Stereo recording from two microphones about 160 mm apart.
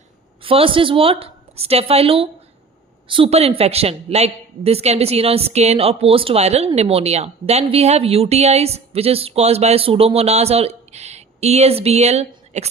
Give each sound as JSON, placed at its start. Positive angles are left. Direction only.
{"t": 0.4, "sound": "a woman's voice", "side_deg": -35}